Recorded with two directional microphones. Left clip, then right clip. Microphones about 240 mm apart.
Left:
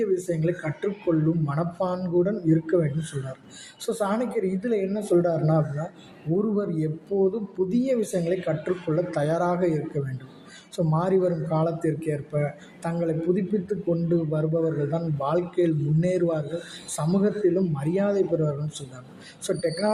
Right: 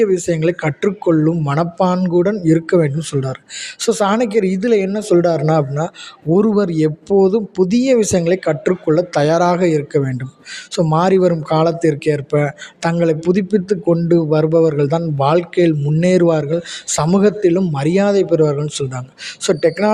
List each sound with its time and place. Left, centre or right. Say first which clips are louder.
0.0 s speech: right 10 dB; right